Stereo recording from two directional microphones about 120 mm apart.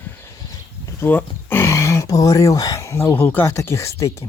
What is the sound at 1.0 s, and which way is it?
Speech, 15° left (ahead or behind).